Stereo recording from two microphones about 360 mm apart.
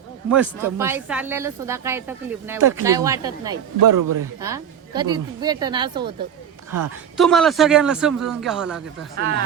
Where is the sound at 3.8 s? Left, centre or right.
Right.